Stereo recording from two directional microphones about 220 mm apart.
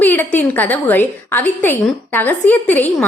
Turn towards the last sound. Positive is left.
turn(degrees=10)  # may be behind; listen again after turning